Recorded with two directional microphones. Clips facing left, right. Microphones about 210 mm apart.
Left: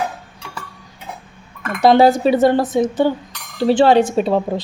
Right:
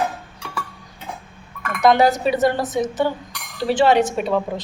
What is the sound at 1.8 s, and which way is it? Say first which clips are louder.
Speech: left 4 dB; 30° left (ahead or behind).